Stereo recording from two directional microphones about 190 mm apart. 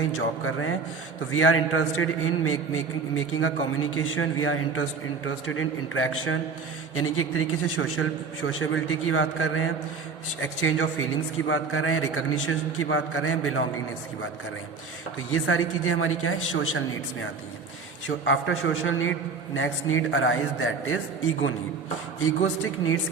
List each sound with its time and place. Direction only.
0.2 s a man's voice: 90° left
15.3 s a man's voice: 90° left
18.3 s a man's voice: 90° left
22.2 s a man's voice: 90° left